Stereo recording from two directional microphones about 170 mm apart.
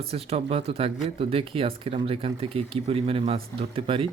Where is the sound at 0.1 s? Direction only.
35° right (ahead or behind).